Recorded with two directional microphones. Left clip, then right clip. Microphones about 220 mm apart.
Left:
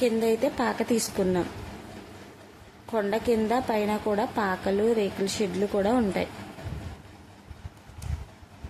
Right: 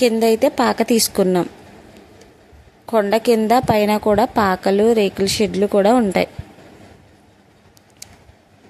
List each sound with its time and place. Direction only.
0.0 s a woman's voice: 45° right (ahead or behind)
2.9 s a woman's voice: 45° right (ahead or behind)